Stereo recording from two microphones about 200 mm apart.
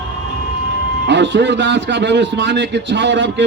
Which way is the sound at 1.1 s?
65° right (ahead or behind).